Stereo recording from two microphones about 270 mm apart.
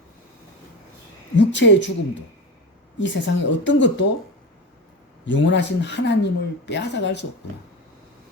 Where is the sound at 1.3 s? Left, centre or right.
Left.